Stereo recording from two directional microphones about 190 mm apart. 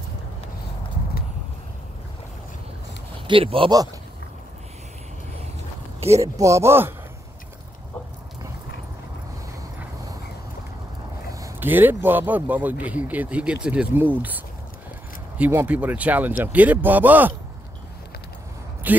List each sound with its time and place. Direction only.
3.3 s speech: 30° right (ahead or behind)
6.1 s speech: 15° right (ahead or behind)
11.3 s speech: 15° right (ahead or behind)
18.9 s speech: 10° right (ahead or behind)